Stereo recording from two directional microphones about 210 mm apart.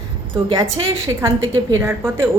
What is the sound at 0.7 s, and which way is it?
A woman's voice, 15° right (ahead or behind).